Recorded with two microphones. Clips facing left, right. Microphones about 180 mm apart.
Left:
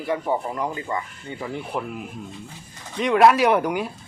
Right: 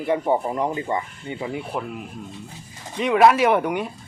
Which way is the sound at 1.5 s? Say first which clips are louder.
Even; centre (ahead or behind).